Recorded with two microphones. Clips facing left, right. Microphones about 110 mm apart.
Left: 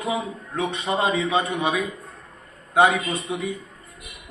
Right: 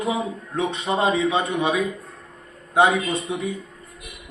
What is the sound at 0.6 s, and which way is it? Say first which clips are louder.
Speech: right 1 dB; 20° right (ahead or behind).